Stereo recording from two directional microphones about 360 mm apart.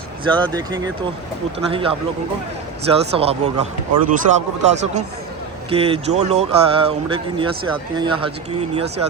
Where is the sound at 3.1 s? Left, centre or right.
Centre.